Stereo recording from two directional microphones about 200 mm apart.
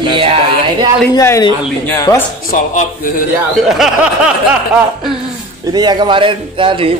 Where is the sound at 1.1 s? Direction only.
15° left (ahead or behind).